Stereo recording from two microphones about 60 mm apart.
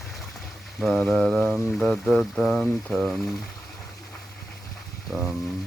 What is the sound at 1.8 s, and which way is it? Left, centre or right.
Speech, centre.